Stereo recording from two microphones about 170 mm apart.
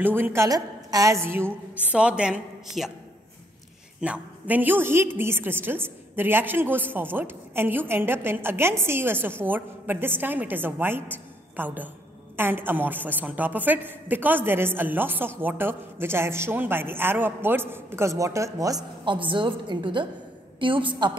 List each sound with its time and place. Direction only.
0.0 s a woman's voice: 10° right (ahead or behind)
4.0 s a woman's voice: 10° right (ahead or behind); by 21.2 s 30° right (ahead or behind)